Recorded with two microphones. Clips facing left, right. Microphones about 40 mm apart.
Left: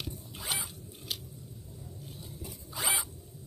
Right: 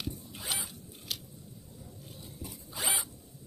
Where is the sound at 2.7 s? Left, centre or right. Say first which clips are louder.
Left 2 dB; left.